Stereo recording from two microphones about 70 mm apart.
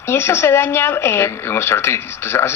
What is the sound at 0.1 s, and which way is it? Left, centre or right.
Speech, left.